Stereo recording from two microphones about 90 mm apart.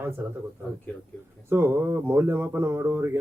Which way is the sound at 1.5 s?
25° right (ahead or behind).